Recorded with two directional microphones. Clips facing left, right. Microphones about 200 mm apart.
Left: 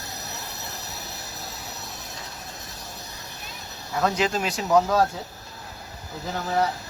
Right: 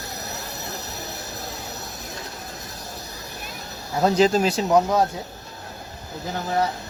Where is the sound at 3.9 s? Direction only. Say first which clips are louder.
Right 6 dB; 30° right (ahead or behind).